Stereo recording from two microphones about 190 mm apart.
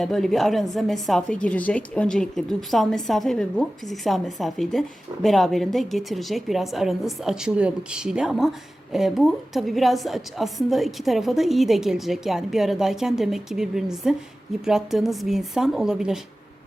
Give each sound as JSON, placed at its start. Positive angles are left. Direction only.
{"t": 0.0, "sound": "a woman's voice", "side_deg": 0}